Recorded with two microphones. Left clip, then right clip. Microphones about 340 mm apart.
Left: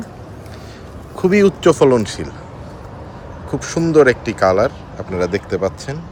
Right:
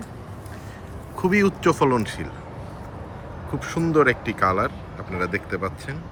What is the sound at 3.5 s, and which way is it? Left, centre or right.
Speech, centre.